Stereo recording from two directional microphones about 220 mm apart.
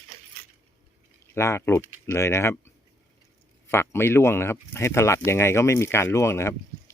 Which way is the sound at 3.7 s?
10° left (ahead or behind).